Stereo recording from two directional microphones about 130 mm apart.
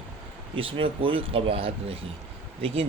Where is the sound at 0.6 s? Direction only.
45° right (ahead or behind).